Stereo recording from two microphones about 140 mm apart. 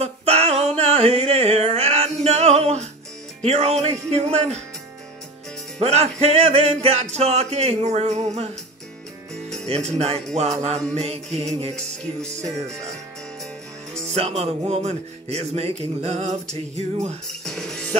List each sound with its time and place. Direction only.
0.0 s music: 50° right (ahead or behind)
3.4 s a man's voice: 50° right (ahead or behind)
5.8 s a man's voice: 50° right (ahead or behind)
9.8 s a man's voice: 50° right (ahead or behind)
14.1 s a man's voice: 50° right (ahead or behind)
17.3 s music: 5° left (ahead or behind)